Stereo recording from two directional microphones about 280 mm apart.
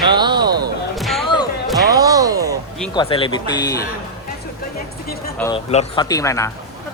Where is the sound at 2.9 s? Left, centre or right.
Centre.